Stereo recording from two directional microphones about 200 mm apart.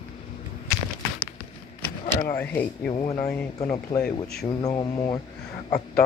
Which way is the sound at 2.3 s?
10° left (ahead or behind).